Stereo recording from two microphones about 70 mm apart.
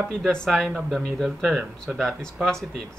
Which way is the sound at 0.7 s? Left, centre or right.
Centre.